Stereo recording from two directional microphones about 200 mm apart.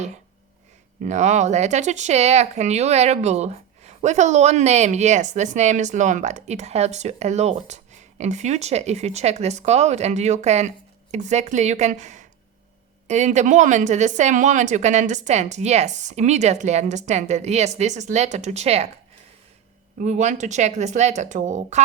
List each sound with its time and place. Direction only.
1.0 s speech: 35° right (ahead or behind)
20.0 s speech: 35° right (ahead or behind)